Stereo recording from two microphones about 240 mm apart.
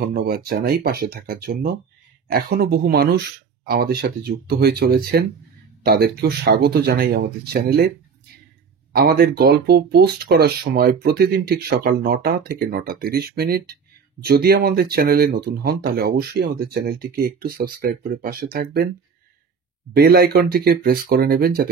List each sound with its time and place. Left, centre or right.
0.0 s speech: right
8.9 s speech: right
20.0 s speech: right